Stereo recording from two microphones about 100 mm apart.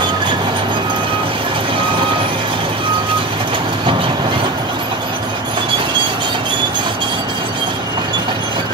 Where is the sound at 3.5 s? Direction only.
60° right (ahead or behind).